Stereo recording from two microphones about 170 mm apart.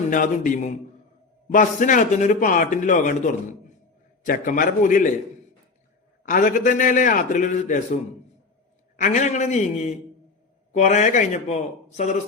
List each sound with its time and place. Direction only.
0.1 s a man's voice: 50° left (ahead or behind)
4.3 s a man's voice: 50° left (ahead or behind)
6.2 s a man's voice: 50° left (ahead or behind)
9.0 s a man's voice: 45° left (ahead or behind)